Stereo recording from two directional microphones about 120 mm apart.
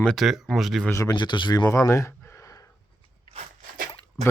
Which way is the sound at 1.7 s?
25° left (ahead or behind).